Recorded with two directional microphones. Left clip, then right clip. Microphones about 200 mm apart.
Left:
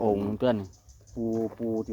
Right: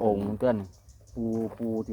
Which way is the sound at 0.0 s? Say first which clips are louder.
Even; 35° left (ahead or behind).